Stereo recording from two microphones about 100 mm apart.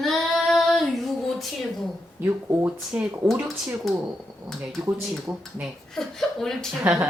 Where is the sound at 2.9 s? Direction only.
15° right (ahead or behind).